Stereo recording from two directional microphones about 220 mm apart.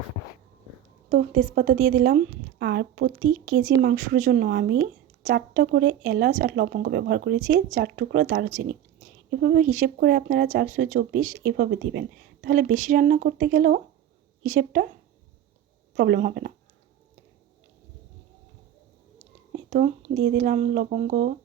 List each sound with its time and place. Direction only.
1.1 s a woman's voice: 35° right (ahead or behind)
16.0 s a woman's voice: 40° right (ahead or behind)
19.7 s a woman's voice: 35° right (ahead or behind)